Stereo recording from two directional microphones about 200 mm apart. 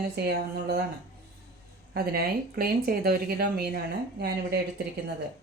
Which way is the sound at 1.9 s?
50° right (ahead or behind).